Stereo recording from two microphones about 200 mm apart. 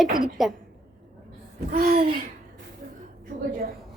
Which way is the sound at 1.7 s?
50° right (ahead or behind).